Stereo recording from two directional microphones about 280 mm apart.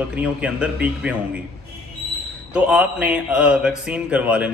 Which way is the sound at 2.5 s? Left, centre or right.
Centre.